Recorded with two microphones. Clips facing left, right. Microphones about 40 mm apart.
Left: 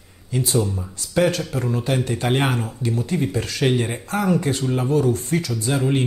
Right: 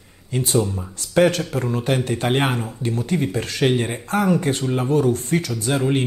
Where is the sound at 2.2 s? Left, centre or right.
Right.